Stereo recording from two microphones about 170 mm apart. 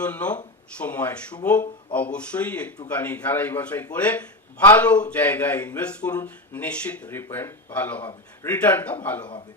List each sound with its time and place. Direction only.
0.0 s speech: 10° left (ahead or behind)